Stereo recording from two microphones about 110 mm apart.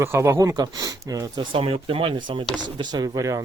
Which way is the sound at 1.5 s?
55° right (ahead or behind).